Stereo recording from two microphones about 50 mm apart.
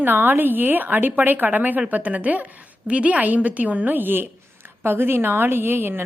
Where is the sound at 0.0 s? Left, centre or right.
Right.